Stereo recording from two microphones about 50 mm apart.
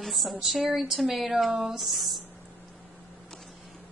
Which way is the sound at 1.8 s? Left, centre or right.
Centre.